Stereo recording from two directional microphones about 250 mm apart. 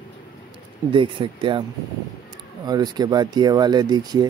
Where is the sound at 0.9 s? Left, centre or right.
Centre.